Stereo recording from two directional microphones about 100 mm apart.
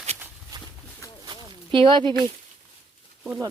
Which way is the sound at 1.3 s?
55° right (ahead or behind).